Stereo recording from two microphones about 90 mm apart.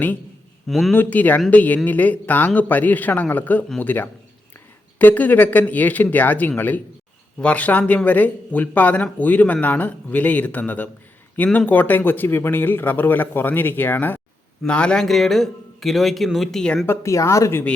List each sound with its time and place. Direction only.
0.7 s a man's voice: centre (ahead or behind)
0.9 s a man's voice: 20° left (ahead or behind)
16.8 s speech: 30° left (ahead or behind)